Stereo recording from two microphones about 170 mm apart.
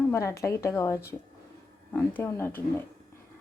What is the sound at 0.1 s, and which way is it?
Speech, 15° left (ahead or behind).